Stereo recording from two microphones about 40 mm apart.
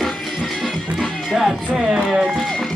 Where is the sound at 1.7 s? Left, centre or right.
Centre.